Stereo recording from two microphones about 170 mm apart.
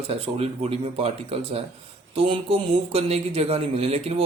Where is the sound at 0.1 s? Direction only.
35° right (ahead or behind).